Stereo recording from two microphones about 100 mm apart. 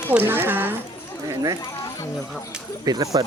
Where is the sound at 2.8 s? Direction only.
35° right (ahead or behind).